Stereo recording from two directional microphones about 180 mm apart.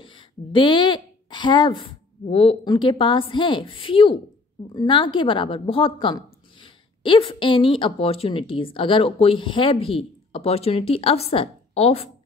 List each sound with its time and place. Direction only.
0.0 s a woman's voice: 30° left (ahead or behind)